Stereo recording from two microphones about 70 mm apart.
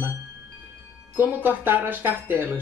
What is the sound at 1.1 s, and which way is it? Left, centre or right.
Speech, right.